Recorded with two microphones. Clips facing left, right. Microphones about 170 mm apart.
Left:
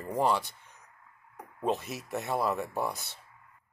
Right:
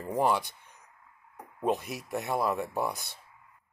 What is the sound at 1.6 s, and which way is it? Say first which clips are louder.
Speech: right 1 dB; 10° right (ahead or behind).